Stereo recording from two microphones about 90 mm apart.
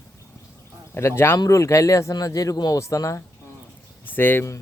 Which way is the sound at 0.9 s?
30° left (ahead or behind).